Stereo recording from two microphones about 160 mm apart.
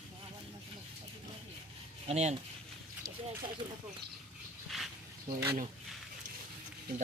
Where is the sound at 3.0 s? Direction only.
25° right (ahead or behind).